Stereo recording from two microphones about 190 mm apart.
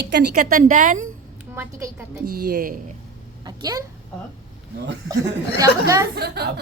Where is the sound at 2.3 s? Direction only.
50° right (ahead or behind).